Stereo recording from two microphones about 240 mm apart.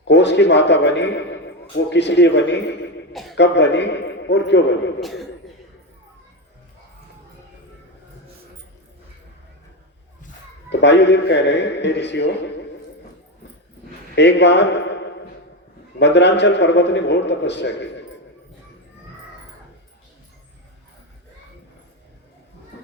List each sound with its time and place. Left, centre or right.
0.0 s a man's voice: left
3.1 s a sound: centre
3.3 s a man's voice: left
10.7 s a man's voice: left
14.2 s a man's voice: left
16.0 s a man's voice: left